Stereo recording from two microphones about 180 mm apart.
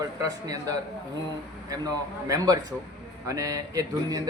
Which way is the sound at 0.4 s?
20° right (ahead or behind).